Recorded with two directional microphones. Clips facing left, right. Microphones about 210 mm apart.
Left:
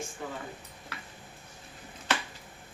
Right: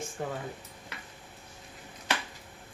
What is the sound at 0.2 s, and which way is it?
Speech, 50° right (ahead or behind).